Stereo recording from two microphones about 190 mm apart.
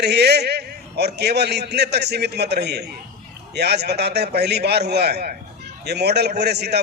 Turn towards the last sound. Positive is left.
turn(degrees=-60)  # may be behind; listen again after turning